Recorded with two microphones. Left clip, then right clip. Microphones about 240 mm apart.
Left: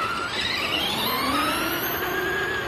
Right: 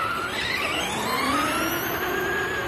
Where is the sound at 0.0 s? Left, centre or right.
Left.